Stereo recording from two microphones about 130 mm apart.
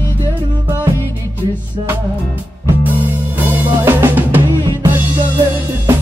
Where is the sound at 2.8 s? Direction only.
15° right (ahead or behind).